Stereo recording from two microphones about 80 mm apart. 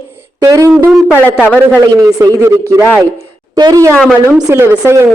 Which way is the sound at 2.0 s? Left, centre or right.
Right.